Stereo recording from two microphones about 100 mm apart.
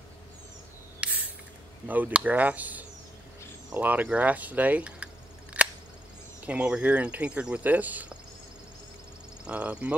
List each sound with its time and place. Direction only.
1.0 s spray: 15° right (ahead or behind)
1.9 s speech: 15° right (ahead or behind)
9.4 s speech: 10° right (ahead or behind)